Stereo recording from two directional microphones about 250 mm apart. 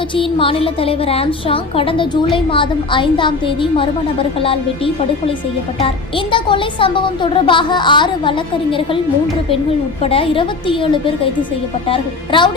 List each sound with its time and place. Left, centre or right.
0.2 s speech: left
5.8 s speech: centre
10.0 s speech: left